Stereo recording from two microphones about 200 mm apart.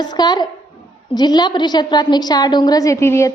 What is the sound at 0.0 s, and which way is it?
A woman's voice, 20° left (ahead or behind).